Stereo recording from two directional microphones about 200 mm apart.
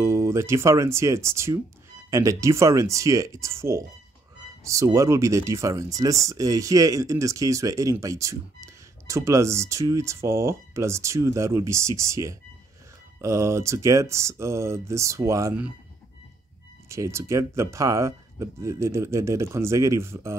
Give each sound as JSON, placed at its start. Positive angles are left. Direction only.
{"t": 0.0, "sound": "speech", "side_deg": -15}
{"t": 16.9, "sound": "speech", "side_deg": -15}